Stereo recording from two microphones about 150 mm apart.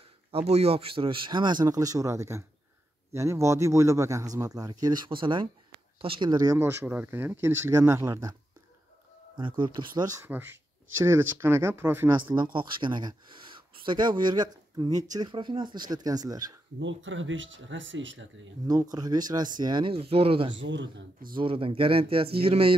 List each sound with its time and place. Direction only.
0.3 s speech: 45° right (ahead or behind); by 8.4 s 25° right (ahead or behind)
9.4 s speech: 30° right (ahead or behind)
10.2 s speech: 15° right (ahead or behind)
12.5 s speech: 30° right (ahead or behind)
18.7 s speech: 25° right (ahead or behind)